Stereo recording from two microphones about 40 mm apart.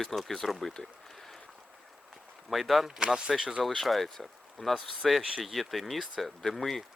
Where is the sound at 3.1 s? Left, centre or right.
Centre.